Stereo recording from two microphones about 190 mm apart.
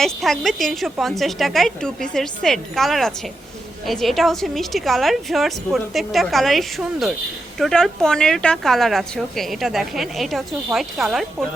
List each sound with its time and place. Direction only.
0.0 s a woman's voice: centre (ahead or behind)